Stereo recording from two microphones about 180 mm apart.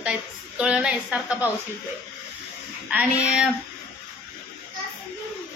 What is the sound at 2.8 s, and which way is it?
Speech, 10° right (ahead or behind).